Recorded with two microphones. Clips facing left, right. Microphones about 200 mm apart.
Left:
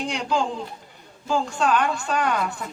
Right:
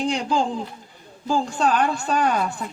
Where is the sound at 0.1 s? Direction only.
35° right (ahead or behind).